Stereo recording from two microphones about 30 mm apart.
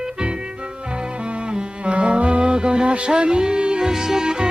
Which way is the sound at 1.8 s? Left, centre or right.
Right.